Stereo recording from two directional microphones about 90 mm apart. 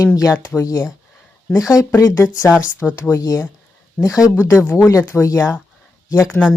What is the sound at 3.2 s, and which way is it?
Speech, 40° left (ahead or behind).